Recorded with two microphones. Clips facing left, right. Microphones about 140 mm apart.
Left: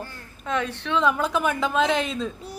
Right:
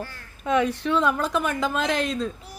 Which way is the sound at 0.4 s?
10° right (ahead or behind).